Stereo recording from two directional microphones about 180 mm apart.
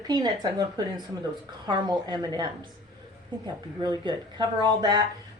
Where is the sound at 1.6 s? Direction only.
25° right (ahead or behind).